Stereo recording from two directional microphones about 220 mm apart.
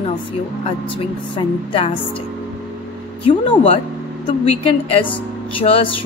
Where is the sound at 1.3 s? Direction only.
25° left (ahead or behind).